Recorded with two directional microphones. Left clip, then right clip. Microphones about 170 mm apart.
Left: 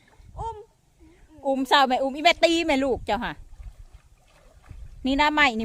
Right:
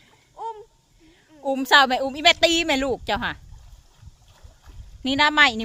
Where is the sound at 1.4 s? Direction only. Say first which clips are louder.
Right 3 dB; 5° left (ahead or behind).